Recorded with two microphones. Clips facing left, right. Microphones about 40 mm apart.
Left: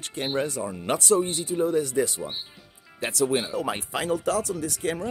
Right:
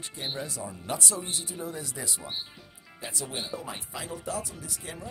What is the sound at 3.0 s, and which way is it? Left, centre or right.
Speech, left.